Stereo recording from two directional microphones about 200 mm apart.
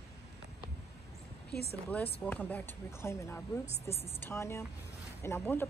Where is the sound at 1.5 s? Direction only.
55° left (ahead or behind).